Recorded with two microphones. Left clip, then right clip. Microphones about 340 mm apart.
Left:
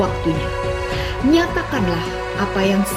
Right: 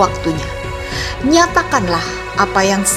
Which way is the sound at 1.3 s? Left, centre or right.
Centre.